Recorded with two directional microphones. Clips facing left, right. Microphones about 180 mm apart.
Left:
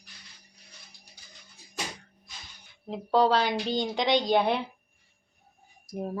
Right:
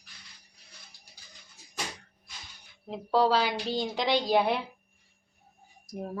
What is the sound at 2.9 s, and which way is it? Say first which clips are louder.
Speech: left 2 dB; 5° right (ahead or behind).